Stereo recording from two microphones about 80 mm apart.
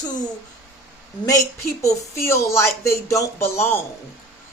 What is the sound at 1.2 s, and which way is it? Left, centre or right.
Speech, left.